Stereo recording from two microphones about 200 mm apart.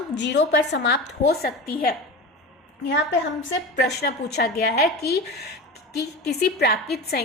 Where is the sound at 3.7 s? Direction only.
55° left (ahead or behind).